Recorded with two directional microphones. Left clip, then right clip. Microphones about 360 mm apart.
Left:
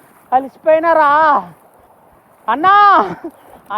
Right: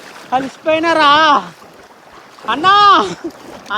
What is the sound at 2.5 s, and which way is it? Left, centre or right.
Speech, centre.